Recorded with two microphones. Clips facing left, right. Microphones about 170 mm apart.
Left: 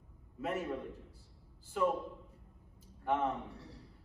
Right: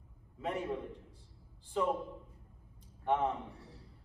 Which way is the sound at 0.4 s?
5° left (ahead or behind).